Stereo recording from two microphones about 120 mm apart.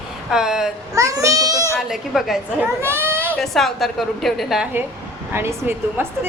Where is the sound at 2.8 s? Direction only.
20° right (ahead or behind).